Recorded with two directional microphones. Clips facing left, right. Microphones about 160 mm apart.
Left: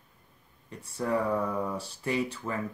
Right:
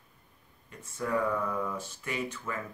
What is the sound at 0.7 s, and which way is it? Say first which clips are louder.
Speech: left 2 dB; 30° left (ahead or behind).